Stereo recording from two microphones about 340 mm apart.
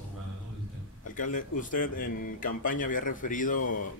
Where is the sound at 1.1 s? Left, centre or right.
Left.